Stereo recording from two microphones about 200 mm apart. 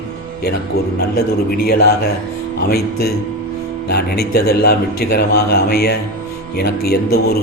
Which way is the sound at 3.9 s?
50° left (ahead or behind).